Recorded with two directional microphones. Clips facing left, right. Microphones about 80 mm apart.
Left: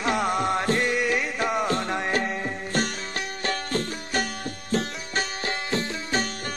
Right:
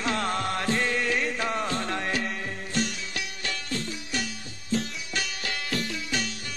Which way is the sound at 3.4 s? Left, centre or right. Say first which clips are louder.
Left 7 dB; left.